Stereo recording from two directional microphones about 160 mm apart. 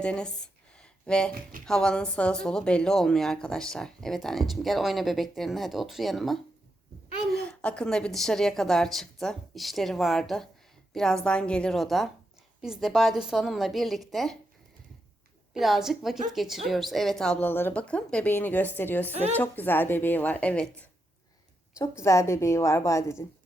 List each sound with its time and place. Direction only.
0.0 s a sound: 5° left (ahead or behind)
1.6 s a woman's voice: 5° left (ahead or behind)
15.5 s a woman's voice: centre (ahead or behind)
21.8 s a woman's voice: 20° left (ahead or behind)